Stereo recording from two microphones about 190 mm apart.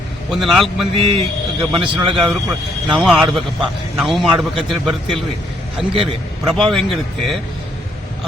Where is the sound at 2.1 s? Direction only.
Centre (ahead or behind).